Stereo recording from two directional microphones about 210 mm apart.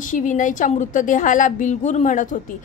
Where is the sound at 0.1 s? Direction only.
40° left (ahead or behind).